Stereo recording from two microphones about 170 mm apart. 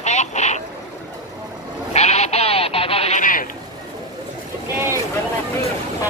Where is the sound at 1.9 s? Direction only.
40° left (ahead or behind).